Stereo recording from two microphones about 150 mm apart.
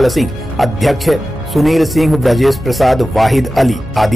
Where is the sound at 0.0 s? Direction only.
Centre (ahead or behind).